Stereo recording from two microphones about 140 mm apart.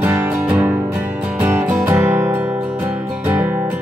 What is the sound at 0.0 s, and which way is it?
Music, 15° right (ahead or behind).